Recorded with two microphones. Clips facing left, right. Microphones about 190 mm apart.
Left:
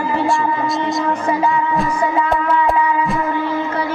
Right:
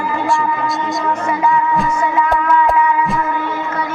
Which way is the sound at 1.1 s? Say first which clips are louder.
Right 4 dB; 30° left (ahead or behind).